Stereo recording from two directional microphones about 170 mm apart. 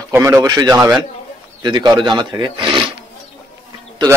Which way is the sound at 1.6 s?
25° right (ahead or behind).